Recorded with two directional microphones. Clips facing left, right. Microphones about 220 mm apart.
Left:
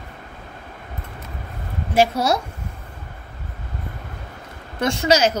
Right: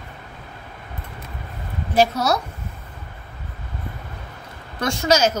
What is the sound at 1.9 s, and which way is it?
Speech, 25° left (ahead or behind).